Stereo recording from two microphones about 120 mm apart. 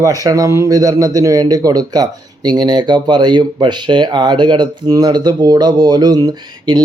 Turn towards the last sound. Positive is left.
turn(degrees=-35)  # may be behind; listen again after turning